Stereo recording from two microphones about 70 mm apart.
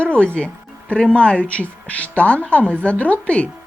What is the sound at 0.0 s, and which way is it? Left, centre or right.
Speech, centre.